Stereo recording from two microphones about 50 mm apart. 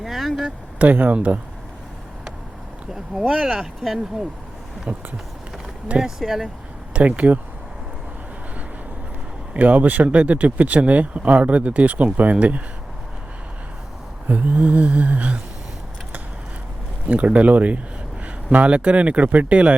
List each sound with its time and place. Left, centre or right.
0.0 s speech: centre
0.8 s speech: right
2.9 s speech: centre
4.9 s speech: right
6.0 s speech: centre
6.9 s speech: right
9.5 s speech: right
14.3 s speech: right
17.1 s speech: right